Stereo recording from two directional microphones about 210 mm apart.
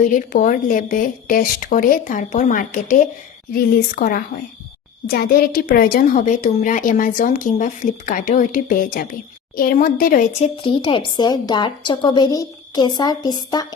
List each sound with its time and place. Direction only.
0.0 s a woman's voice: 40° left (ahead or behind)
10.6 s a woman's voice: 25° left (ahead or behind)